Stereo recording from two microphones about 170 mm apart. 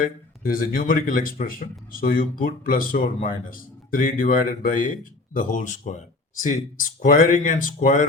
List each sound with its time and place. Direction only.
0.0 s speech: 55° left (ahead or behind)